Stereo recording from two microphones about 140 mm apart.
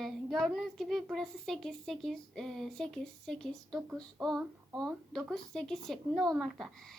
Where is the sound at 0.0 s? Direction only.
Centre (ahead or behind).